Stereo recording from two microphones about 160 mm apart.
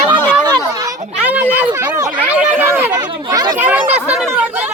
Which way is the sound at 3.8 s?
40° right (ahead or behind).